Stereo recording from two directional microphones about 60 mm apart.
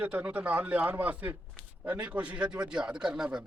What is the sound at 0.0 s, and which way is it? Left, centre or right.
A man's voice, right.